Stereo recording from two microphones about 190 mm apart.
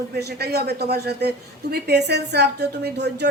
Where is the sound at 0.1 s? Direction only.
55° right (ahead or behind).